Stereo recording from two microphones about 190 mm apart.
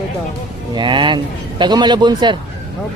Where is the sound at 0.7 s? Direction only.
25° right (ahead or behind).